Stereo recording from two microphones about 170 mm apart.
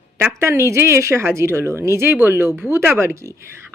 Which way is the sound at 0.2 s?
15° right (ahead or behind).